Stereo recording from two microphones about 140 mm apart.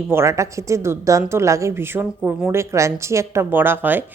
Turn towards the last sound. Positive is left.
turn(degrees=-15)  # may be behind; listen again after turning